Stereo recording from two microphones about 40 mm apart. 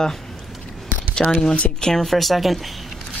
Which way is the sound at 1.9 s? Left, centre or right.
Centre.